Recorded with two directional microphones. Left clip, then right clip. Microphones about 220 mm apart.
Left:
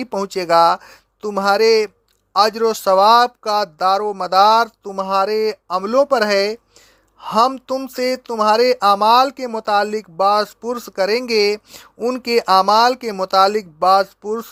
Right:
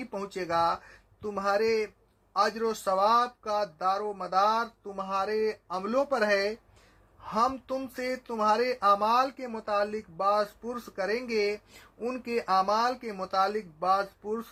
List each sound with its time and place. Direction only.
0.0 s speech: 45° left (ahead or behind)